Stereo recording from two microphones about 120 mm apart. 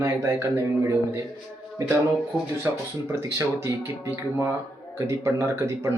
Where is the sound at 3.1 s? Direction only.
25° right (ahead or behind).